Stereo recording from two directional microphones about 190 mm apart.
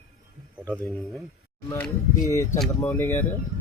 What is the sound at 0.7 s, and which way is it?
Speech, 5° left (ahead or behind).